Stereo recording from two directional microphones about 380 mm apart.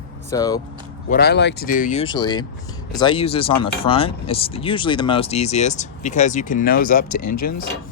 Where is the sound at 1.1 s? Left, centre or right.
Left.